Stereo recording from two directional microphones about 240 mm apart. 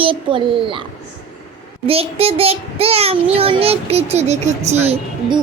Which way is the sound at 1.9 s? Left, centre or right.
Right.